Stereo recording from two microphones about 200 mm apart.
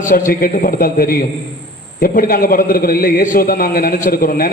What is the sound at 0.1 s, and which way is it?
A man's voice, 45° left (ahead or behind).